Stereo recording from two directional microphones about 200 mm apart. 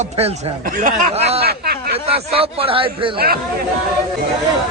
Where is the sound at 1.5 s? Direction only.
50° right (ahead or behind).